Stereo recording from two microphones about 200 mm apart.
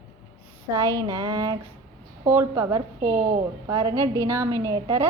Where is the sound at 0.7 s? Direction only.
15° right (ahead or behind).